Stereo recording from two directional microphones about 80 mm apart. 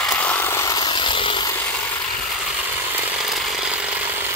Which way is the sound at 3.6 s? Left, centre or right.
Centre.